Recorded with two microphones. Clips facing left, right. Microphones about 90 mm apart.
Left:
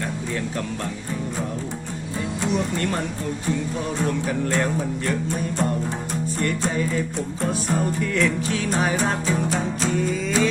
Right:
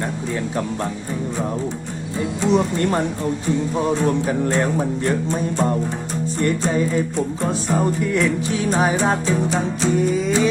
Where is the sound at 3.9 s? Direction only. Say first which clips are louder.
Right 4 dB; 25° right (ahead or behind).